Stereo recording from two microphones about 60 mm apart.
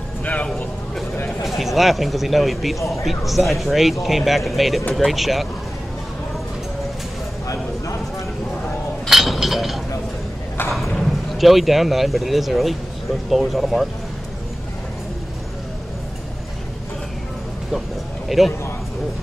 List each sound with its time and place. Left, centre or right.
0.2 s vehicle: left
1.4 s speech: centre
9.0 s chink: centre
11.1 s speech: centre
18.3 s speech: centre